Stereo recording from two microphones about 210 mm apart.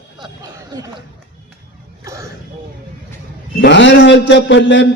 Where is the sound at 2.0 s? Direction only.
15° right (ahead or behind).